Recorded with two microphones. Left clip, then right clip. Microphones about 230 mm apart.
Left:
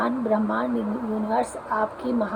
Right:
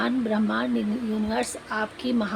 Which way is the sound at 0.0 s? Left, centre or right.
Right.